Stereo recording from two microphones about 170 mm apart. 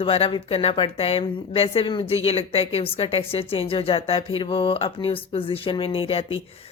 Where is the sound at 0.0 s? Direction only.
35° left (ahead or behind).